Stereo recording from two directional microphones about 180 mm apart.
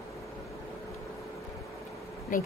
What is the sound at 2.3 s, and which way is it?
Speech, 45° left (ahead or behind).